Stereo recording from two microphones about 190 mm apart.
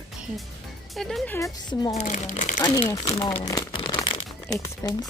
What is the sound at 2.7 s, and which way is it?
Speech, 20° left (ahead or behind).